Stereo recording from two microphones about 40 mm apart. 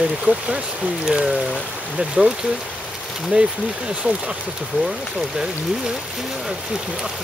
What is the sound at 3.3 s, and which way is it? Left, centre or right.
Speech, right.